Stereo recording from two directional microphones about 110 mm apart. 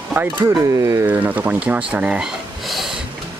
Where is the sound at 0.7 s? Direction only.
30° right (ahead or behind).